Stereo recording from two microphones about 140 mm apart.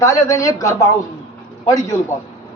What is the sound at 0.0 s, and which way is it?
A man's voice, 25° left (ahead or behind).